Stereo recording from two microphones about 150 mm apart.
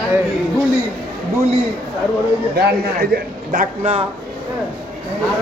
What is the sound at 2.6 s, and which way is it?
Speech, 90° right.